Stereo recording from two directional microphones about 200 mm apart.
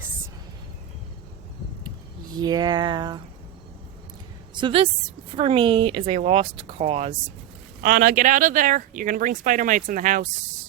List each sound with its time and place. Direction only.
2.3 s speech: 20° right (ahead or behind)
4.5 s a woman's voice: 25° right (ahead or behind)
7.8 s speech: 40° right (ahead or behind)